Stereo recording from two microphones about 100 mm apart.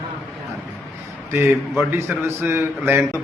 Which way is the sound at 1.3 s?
25° right (ahead or behind).